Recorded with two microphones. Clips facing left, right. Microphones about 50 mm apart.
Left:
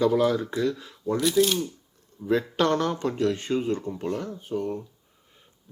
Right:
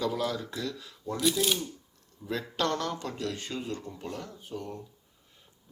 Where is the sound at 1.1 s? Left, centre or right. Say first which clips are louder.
Left 6 dB; centre.